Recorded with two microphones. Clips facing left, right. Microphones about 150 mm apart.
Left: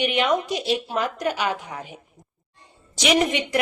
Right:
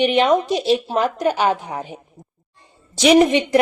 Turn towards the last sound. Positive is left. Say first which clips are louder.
# right 8 dB
turn(degrees=-30)  # may be behind; listen again after turning